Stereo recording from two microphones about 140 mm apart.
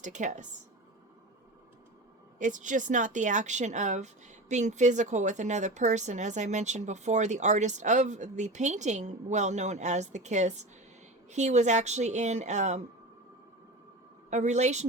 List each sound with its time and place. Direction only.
0.0 s speech: 60° right (ahead or behind)
2.4 s speech: 65° right (ahead or behind)
14.3 s speech: 55° right (ahead or behind)